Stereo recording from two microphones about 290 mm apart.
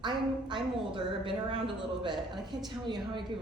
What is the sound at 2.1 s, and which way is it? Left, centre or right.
Speech, centre.